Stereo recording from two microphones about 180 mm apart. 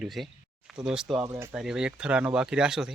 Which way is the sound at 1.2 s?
15° right (ahead or behind).